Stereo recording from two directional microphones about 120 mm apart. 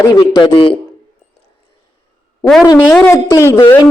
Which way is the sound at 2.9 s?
15° left (ahead or behind).